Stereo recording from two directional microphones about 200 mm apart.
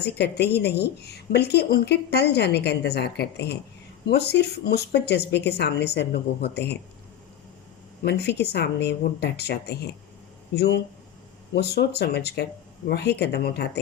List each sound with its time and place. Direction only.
0.0 s a woman's voice: 55° left (ahead or behind)
8.0 s a woman's voice: 55° left (ahead or behind)